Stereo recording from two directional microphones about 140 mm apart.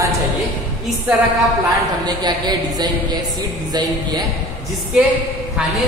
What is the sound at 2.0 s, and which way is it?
A woman's voice, 30° right (ahead or behind).